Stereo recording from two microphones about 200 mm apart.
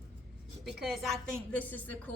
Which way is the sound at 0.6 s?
Centre (ahead or behind).